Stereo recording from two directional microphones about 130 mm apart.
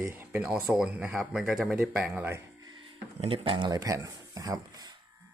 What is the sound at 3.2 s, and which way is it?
Speech, 40° right (ahead or behind).